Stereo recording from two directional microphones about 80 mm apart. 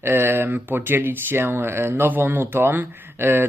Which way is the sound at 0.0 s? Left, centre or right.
Right.